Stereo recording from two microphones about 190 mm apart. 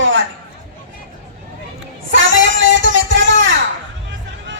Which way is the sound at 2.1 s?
85° right.